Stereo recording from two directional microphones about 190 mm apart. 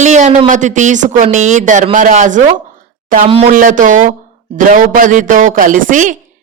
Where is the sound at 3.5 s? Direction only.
45° right (ahead or behind).